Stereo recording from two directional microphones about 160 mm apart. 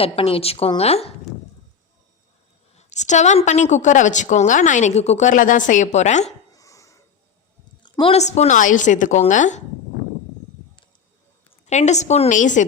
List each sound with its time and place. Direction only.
0.0 s a woman's voice: 35° left (ahead or behind)
2.7 s a woman's voice: 45° left (ahead or behind)
6.5 s a sound: 20° left (ahead or behind)
8.1 s a woman's voice: 45° left (ahead or behind)
11.6 s a woman's voice: 45° left (ahead or behind)